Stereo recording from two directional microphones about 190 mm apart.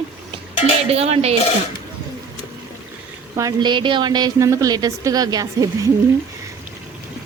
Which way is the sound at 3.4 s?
20° right (ahead or behind).